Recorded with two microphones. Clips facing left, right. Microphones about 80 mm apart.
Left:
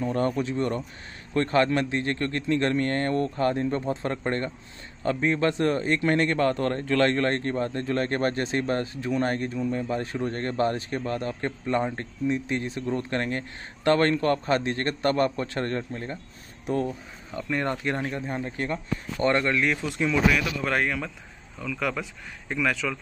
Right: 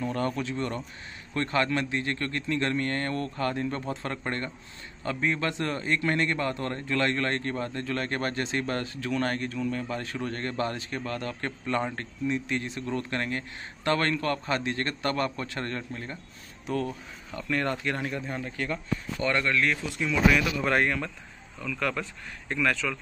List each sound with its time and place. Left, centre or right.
0.0 s a man's voice: left
17.3 s a man's voice: centre
20.1 s speech: centre